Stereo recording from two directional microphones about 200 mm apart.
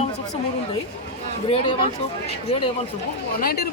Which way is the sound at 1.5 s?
30° left (ahead or behind).